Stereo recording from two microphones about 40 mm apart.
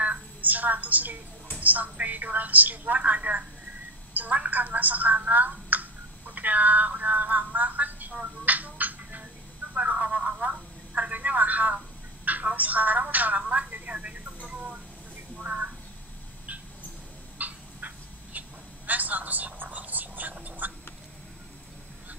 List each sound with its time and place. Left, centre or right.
0.0 s a woman's voice: right
9.8 s telephone: right
14.5 s chicken: right
15.3 s a sound: right
17.4 s dog: right
18.9 s whispering: right